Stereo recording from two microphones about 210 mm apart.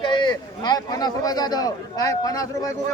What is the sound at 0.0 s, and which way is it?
A man's voice, 20° left (ahead or behind).